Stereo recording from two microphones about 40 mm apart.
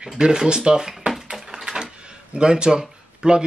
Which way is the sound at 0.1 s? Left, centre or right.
Centre.